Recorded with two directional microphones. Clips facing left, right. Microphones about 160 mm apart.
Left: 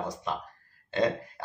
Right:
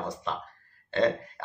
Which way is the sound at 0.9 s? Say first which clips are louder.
Right 2 dB; 15° left (ahead or behind).